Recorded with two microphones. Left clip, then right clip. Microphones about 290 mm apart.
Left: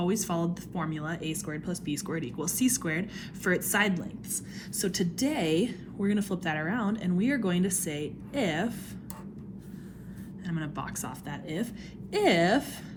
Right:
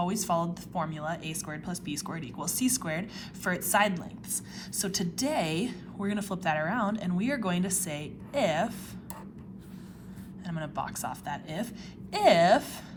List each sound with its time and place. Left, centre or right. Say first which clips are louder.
0.0 s a woman's voice: right 1 dB; centre
10.4 s a woman's voice: right 2 dB; centre